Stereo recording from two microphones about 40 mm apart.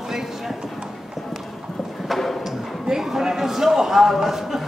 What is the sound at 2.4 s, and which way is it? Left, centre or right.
Speech, centre.